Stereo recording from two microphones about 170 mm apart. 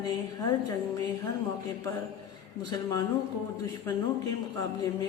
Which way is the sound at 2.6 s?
25° left (ahead or behind).